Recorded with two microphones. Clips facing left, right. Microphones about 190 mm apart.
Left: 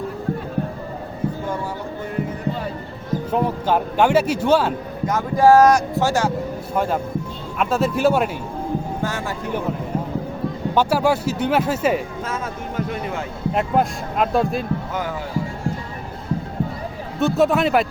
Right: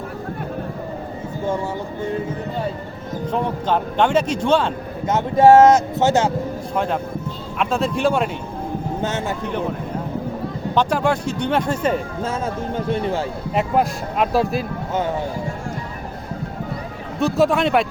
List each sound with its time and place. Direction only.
3.3 s speech: 5° left (ahead or behind)
5.0 s speech: 25° right (ahead or behind)
6.7 s speech: 5° left (ahead or behind)
9.0 s speech: 20° right (ahead or behind)
10.8 s speech: 5° left (ahead or behind)
12.2 s speech: 30° right (ahead or behind)
13.5 s speech: centre (ahead or behind)
17.2 s speech: centre (ahead or behind)